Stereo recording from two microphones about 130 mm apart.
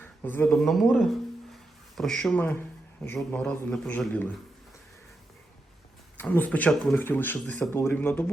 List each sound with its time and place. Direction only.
0.0 s a sound: 15° left (ahead or behind)
0.4 s a man's voice: centre (ahead or behind)
6.1 s speech: 15° left (ahead or behind)